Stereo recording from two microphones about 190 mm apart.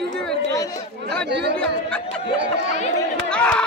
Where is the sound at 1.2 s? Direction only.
65° right (ahead or behind).